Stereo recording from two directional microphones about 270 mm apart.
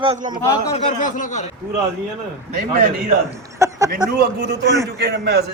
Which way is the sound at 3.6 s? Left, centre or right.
Centre.